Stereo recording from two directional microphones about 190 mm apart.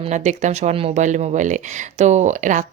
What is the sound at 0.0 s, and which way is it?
Speech, 40° right (ahead or behind).